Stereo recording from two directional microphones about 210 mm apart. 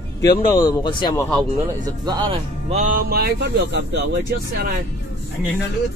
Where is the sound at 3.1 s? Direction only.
45° right (ahead or behind).